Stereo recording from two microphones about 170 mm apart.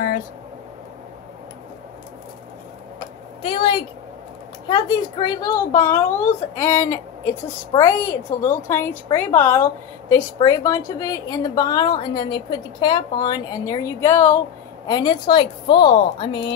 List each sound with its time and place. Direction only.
3.4 s a woman's voice: 30° left (ahead or behind)
14.9 s a woman's voice: 25° left (ahead or behind)